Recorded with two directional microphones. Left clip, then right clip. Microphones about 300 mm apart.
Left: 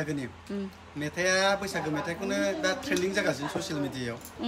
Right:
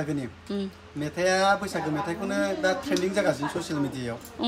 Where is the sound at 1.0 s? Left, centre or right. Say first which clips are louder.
Right 3 dB; centre.